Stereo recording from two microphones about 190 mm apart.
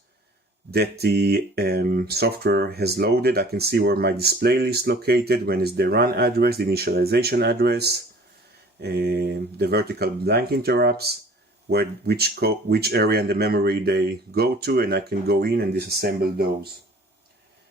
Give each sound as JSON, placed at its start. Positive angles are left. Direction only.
{"t": 0.7, "sound": "speech", "side_deg": -55}